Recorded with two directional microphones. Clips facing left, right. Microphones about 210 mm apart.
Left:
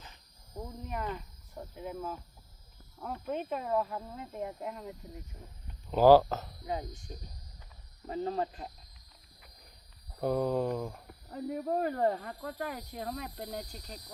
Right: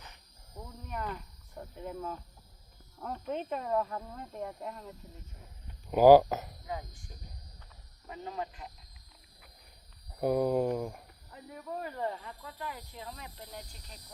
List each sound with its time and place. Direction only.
0.9 s speech: 5° left (ahead or behind)
5.9 s speech: 15° right (ahead or behind)
6.7 s speech: 25° left (ahead or behind)
8.0 s speech: 35° left (ahead or behind)
10.2 s speech: 10° right (ahead or behind)
11.6 s speech: 45° left (ahead or behind)